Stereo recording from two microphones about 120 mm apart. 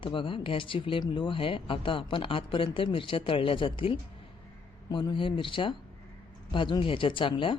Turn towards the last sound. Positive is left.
turn(degrees=45)  # may be behind; listen again after turning